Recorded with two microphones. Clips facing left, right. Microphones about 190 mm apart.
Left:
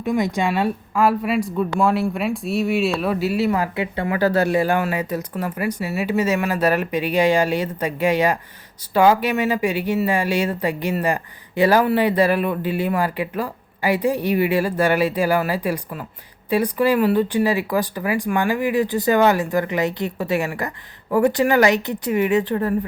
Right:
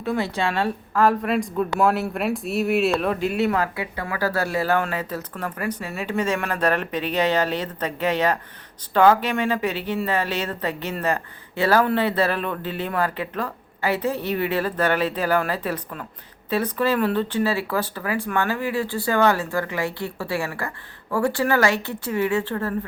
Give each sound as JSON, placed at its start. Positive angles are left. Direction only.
{"t": 0.0, "sound": "a woman's voice", "side_deg": 15}
{"t": 3.8, "sound": "speech", "side_deg": 25}